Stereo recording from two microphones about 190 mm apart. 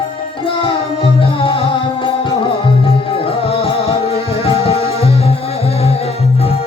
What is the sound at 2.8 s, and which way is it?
Music, 30° left (ahead or behind).